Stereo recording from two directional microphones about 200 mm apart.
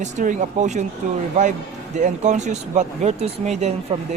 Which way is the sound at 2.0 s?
40° right (ahead or behind).